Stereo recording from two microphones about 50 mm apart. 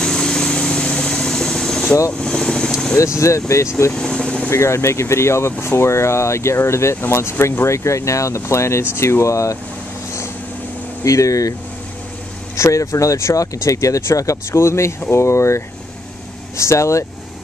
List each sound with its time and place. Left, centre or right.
0.0 s vehicle: centre
3.2 s speech: left
3.9 s vehicle: centre
4.5 s speech: left
8.4 s speech: left
11.1 s speech: left
12.5 s speech: left
16.5 s speech: left